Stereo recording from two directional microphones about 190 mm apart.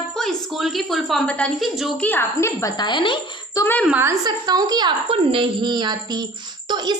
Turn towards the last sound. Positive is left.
turn(degrees=-25)  # may be behind; listen again after turning